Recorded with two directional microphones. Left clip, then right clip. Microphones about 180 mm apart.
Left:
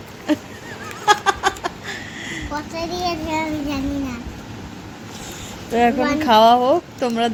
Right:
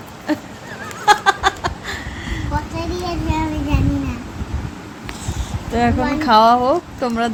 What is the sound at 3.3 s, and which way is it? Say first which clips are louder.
Child singing: right 1 dB; 60° left (ahead or behind).